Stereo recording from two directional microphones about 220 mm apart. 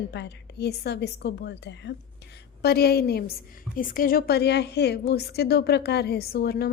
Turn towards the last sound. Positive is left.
turn(degrees=45)  # may be behind; listen again after turning